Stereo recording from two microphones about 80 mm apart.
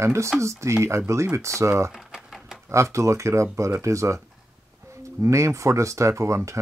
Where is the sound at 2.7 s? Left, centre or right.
Right.